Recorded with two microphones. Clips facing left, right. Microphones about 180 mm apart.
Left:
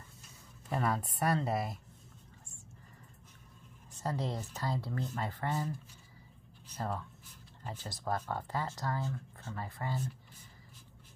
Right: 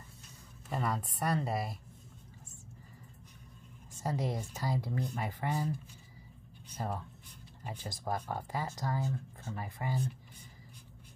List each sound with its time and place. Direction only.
0.7 s speech: centre (ahead or behind)
4.0 s speech: 10° right (ahead or behind)
6.8 s speech: 15° right (ahead or behind)